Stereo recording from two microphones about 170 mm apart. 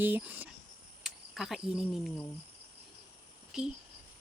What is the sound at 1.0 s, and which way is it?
Cricket, centre (ahead or behind).